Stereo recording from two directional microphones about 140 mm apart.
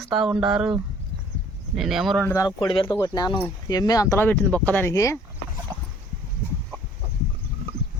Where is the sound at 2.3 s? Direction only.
30° left (ahead or behind); by 4.9 s 10° left (ahead or behind).